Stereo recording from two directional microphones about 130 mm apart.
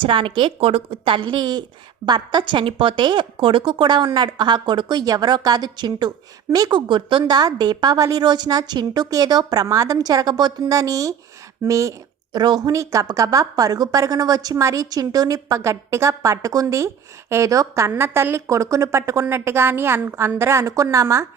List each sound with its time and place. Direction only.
0.0 s a woman's voice: 40° right (ahead or behind); by 21.2 s 25° right (ahead or behind)